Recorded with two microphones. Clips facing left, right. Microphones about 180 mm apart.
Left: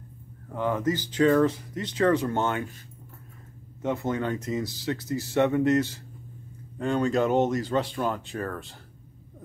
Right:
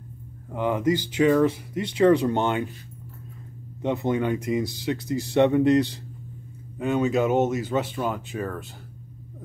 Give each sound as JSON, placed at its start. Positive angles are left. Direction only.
{"t": 0.5, "sound": "speech", "side_deg": -15}
{"t": 3.8, "sound": "speech", "side_deg": -20}